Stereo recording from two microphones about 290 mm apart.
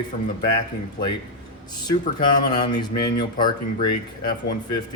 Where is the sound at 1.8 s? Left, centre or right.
Centre.